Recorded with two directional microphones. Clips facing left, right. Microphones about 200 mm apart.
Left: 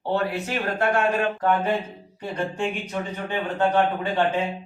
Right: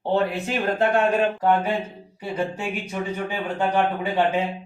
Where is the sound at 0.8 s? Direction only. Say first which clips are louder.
Right 2 dB; 20° right (ahead or behind).